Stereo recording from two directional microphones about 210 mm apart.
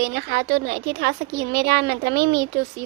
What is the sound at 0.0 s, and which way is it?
A woman's voice, 50° right (ahead or behind).